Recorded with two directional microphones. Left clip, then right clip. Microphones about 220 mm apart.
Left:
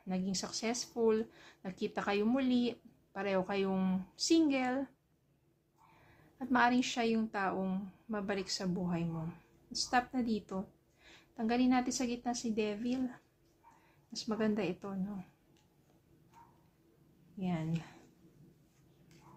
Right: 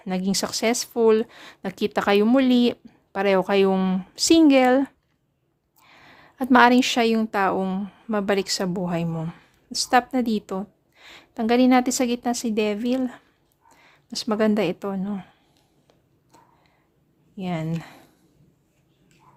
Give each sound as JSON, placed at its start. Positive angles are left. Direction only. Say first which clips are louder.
{"t": 0.0, "sound": "speech", "louder": "right 14 dB", "side_deg": -50}
{"t": 5.9, "sound": "a woman's voice", "louder": "right 17 dB", "side_deg": -50}
{"t": 17.3, "sound": "speech", "louder": "right 11 dB", "side_deg": -50}